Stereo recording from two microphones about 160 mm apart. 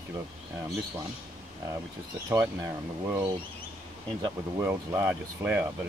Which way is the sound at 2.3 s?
15° right (ahead or behind).